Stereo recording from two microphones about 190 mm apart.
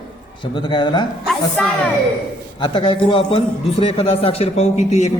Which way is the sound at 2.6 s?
25° left (ahead or behind).